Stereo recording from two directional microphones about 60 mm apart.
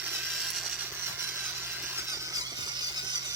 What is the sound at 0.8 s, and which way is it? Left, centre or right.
Sawing, right.